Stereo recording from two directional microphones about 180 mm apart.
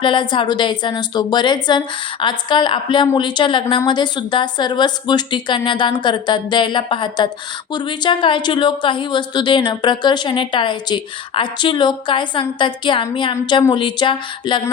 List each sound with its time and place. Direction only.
0.0 s speech: 25° left (ahead or behind)